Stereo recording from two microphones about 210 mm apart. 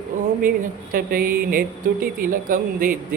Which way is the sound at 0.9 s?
45° right (ahead or behind).